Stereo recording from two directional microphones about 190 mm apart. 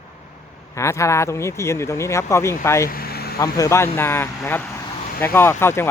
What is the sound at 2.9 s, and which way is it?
Vehicle, 55° left (ahead or behind).